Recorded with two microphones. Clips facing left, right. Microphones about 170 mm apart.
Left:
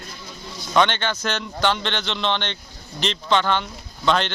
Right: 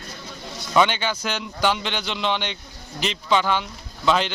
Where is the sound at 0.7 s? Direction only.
5° right (ahead or behind).